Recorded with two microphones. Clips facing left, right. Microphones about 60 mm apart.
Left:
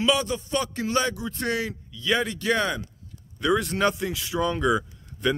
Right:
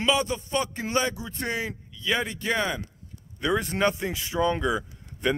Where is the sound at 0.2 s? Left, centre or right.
Right.